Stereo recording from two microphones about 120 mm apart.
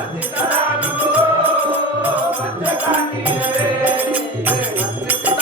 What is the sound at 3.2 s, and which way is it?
Music, 15° right (ahead or behind).